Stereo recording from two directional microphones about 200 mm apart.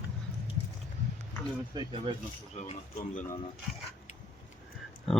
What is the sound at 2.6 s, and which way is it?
Speech, 35° left (ahead or behind).